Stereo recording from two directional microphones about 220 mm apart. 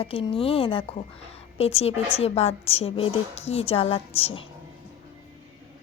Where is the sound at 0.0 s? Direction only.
25° left (ahead or behind).